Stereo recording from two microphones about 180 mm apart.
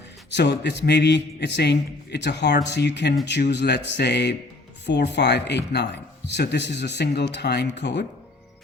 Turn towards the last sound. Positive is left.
turn(degrees=70)  # may be behind; listen again after turning